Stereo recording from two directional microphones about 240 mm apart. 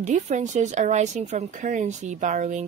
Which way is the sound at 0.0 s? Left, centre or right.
Right.